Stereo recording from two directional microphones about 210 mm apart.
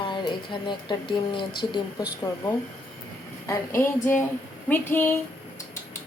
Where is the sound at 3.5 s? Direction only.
10° left (ahead or behind).